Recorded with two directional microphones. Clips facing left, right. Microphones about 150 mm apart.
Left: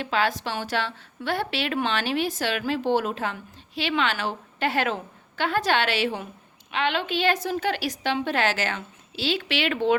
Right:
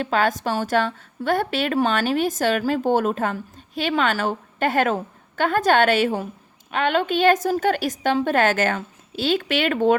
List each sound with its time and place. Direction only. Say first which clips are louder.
0.0 s a woman's voice: right 4 dB; 45° right (ahead or behind)